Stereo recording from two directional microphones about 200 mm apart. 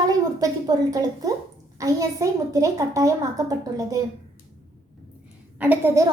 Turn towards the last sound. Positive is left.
turn(degrees=-10)  # may be behind; listen again after turning